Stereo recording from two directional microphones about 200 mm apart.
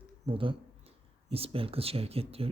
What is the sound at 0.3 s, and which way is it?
Speech, 25° right (ahead or behind).